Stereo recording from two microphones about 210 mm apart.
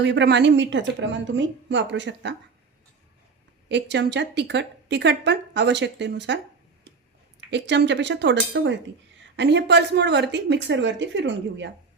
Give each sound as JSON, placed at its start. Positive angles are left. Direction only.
{"t": 0.0, "sound": "a woman's voice", "side_deg": -55}
{"t": 3.7, "sound": "a woman's voice", "side_deg": -55}
{"t": 7.5, "sound": "a woman's voice", "side_deg": -55}